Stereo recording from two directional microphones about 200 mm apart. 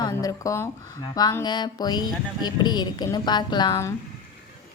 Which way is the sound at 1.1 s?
20° left (ahead or behind).